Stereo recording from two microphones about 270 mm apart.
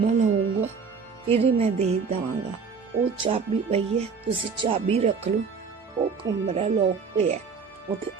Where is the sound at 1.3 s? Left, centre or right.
Right.